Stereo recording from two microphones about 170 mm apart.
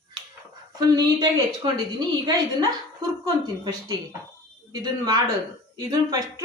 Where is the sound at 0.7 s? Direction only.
25° right (ahead or behind).